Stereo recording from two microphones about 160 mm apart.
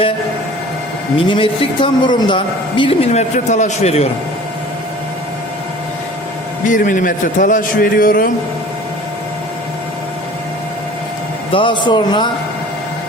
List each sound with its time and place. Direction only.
1.3 s a man's voice: 30° left (ahead or behind)
3.1 s a man's voice: 45° left (ahead or behind)
6.7 s a man's voice: 55° left (ahead or behind)
11.5 s speech: 30° left (ahead or behind)